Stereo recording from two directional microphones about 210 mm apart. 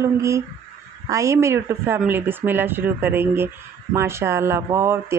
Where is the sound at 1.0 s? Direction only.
15° right (ahead or behind).